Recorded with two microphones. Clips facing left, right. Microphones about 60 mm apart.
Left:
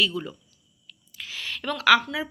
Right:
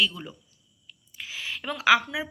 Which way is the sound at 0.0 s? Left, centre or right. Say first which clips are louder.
Left 2 dB; centre.